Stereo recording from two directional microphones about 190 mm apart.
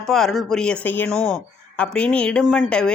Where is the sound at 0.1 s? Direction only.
Centre (ahead or behind).